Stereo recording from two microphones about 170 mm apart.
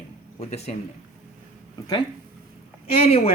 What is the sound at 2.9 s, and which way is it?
Speech, 35° left (ahead or behind).